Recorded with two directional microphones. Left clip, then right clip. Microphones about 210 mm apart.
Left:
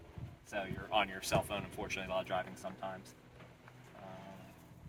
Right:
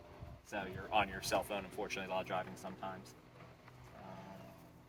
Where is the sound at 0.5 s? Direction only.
20° left (ahead or behind).